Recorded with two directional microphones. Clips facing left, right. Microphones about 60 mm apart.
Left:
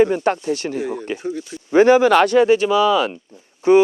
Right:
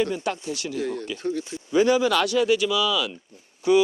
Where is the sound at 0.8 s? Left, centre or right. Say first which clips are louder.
Left 4 dB; centre.